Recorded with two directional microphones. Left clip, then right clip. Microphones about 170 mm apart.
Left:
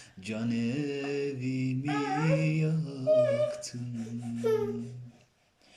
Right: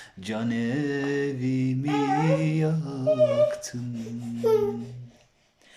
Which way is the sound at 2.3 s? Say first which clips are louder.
Right 5 dB; 5° left (ahead or behind).